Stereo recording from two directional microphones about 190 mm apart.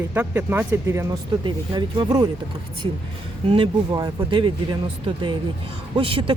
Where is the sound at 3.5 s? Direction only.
25° right (ahead or behind).